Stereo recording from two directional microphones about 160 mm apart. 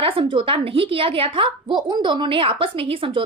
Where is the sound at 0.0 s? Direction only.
30° right (ahead or behind).